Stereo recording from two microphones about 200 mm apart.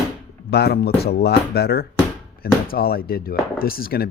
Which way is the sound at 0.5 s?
55° left (ahead or behind).